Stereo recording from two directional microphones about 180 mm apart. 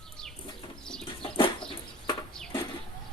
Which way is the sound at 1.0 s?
30° left (ahead or behind).